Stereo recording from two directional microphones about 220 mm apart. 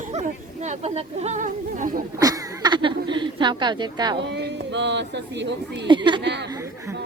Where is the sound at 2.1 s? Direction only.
15° right (ahead or behind).